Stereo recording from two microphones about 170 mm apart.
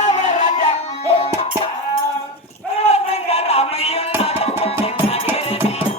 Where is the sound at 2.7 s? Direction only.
40° left (ahead or behind).